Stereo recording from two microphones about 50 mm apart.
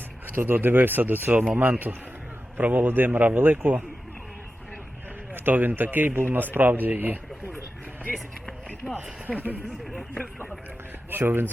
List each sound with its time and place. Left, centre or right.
0.3 s speech: right
5.3 s speech: right
8.8 s speech: centre
9.2 s speech: right
9.9 s speech: left
11.1 s speech: right